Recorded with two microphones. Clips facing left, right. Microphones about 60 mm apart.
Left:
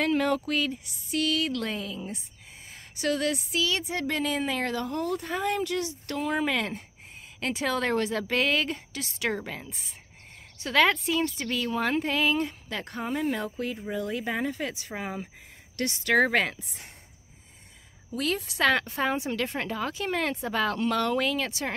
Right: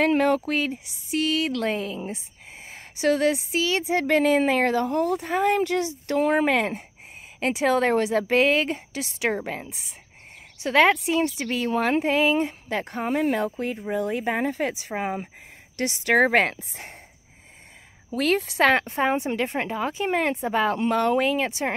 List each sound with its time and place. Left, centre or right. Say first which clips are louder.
0.0 s a woman's voice: right 5 dB; right
4.2 s speech: right 9 dB; right
6.1 s speech: right 7 dB; right
7.3 s a woman's voice: right 7 dB; right
13.1 s speech: right 6 dB; right
13.8 s a woman's voice: right 7 dB; right
18.1 s speech: right 7 dB; right
18.5 s a woman's voice: right 4 dB; right